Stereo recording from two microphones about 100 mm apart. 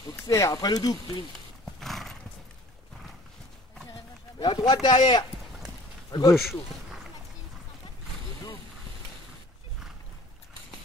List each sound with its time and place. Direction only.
0.3 s speech: 30° left (ahead or behind)
1.8 s horse: centre (ahead or behind)
4.4 s speech: 45° left (ahead or behind)
6.3 s speech: 5° right (ahead or behind)